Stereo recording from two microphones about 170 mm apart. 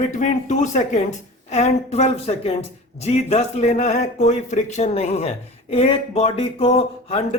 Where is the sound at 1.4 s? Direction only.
40° left (ahead or behind).